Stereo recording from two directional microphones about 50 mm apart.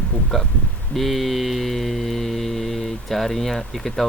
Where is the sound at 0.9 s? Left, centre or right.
Centre.